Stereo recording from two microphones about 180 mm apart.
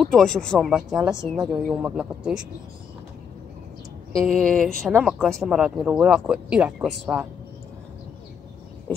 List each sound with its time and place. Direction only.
0.0 s speech: centre (ahead or behind)
4.1 s speech: 5° left (ahead or behind)